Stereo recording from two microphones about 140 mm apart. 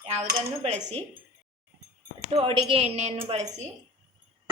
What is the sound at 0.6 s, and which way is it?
Speech, 45° right (ahead or behind).